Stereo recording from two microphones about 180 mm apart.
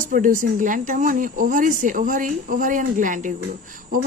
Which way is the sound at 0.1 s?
45° right (ahead or behind).